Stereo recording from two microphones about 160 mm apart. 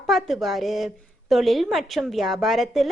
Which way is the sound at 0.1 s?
Centre (ahead or behind).